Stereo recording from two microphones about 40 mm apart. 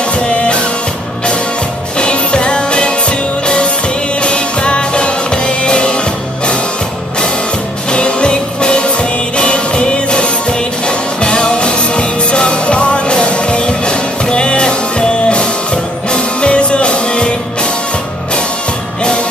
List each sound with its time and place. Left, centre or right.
2.0 s music: left
7.9 s music: left